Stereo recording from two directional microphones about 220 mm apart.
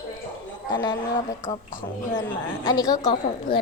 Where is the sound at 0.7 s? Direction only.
20° left (ahead or behind).